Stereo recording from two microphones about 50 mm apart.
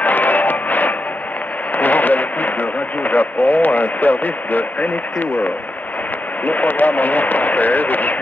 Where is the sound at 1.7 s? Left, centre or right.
Left.